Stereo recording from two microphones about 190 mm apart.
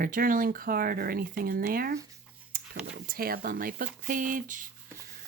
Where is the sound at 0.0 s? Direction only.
50° right (ahead or behind).